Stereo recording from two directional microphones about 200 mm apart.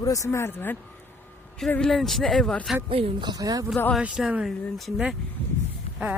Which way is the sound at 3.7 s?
10° left (ahead or behind).